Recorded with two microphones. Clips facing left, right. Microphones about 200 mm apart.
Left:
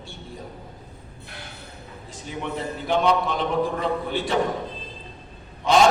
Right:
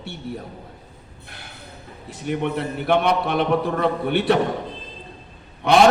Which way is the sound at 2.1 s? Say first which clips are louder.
Right 7 dB; 65° right (ahead or behind).